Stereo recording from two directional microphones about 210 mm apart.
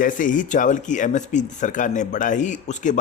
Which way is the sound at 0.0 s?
40° left (ahead or behind).